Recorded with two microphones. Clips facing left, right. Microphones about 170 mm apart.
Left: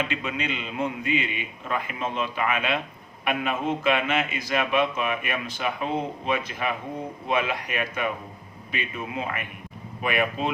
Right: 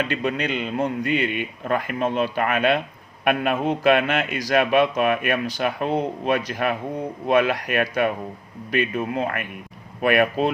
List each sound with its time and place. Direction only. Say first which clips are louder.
0.2 s a man's voice: right 6 dB; 60° right (ahead or behind)